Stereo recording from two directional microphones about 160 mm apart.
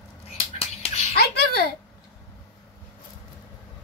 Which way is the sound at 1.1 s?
80° left.